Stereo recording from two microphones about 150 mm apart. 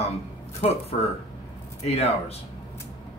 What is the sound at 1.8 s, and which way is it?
Speech, 45° left (ahead or behind).